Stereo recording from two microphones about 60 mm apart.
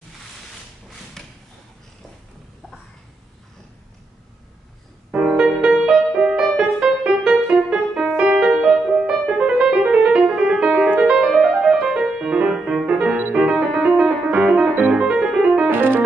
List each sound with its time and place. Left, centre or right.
1.2 s a sound: centre
5.3 s music: centre
11.4 s music: centre
13.4 s piano: centre
15.7 s music: right